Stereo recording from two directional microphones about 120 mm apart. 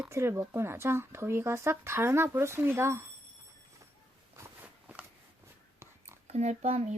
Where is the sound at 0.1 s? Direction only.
20° right (ahead or behind).